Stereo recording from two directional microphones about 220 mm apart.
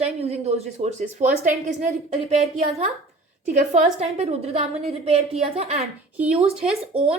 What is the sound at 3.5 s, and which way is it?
A woman's voice, 30° right (ahead or behind).